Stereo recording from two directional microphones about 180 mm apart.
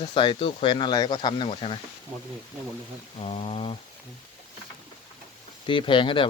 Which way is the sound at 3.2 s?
35° left (ahead or behind).